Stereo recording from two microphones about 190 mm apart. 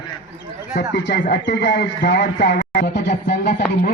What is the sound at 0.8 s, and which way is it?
Speech, 65° left (ahead or behind).